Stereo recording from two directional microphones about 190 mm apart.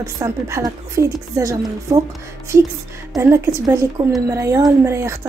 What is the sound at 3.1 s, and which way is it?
A woman's voice, 15° right (ahead or behind).